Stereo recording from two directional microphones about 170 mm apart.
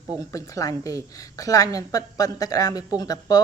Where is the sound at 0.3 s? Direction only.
20° left (ahead or behind).